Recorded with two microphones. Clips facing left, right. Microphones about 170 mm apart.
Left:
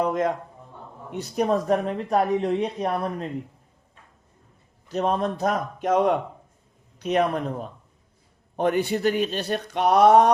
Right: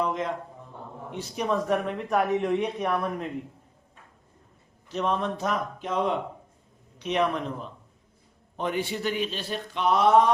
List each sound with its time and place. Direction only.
0.0 s a sound: 50° left (ahead or behind)
1.1 s speech: 40° left (ahead or behind)
4.9 s speech: 40° left (ahead or behind)